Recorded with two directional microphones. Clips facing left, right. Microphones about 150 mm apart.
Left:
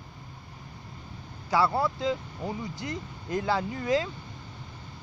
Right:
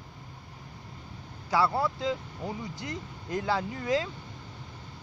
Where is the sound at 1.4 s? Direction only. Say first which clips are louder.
Left 1 dB; 40° left (ahead or behind).